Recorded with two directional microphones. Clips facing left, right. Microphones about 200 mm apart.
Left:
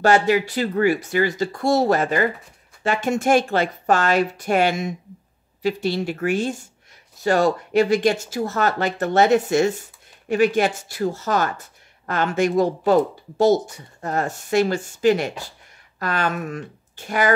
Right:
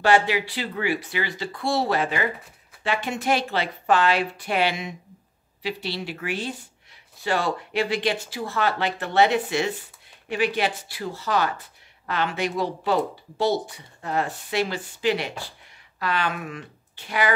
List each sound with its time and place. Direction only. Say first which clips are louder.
0.0 s speech: left 3 dB; 45° left (ahead or behind)